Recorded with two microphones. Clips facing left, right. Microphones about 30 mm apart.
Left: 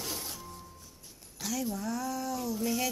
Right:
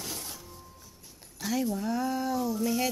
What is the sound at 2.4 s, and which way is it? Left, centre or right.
Music, centre.